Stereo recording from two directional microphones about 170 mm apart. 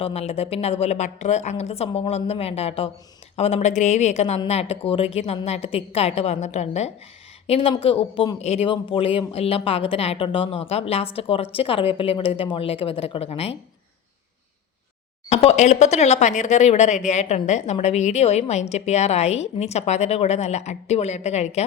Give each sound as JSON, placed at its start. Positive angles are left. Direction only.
{"t": 0.0, "sound": "speech", "side_deg": 35}
{"t": 15.3, "sound": "speech", "side_deg": 40}